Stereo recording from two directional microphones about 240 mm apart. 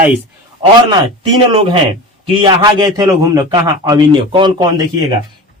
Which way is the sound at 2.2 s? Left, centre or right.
Centre.